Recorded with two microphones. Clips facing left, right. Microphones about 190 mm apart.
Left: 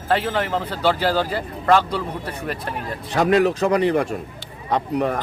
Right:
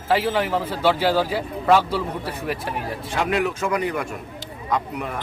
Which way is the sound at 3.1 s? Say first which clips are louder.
Left 6 dB; 35° left (ahead or behind).